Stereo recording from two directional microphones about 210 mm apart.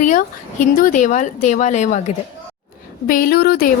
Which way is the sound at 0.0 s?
35° left (ahead or behind).